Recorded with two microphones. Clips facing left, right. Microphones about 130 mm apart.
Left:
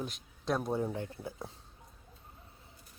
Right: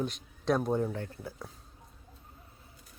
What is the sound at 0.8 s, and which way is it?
Speech, 15° left (ahead or behind).